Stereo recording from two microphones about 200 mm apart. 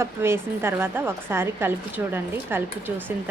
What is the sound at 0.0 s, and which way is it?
A woman's voice, 10° right (ahead or behind).